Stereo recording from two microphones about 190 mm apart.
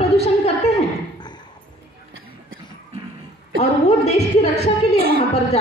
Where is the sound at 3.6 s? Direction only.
35° left (ahead or behind).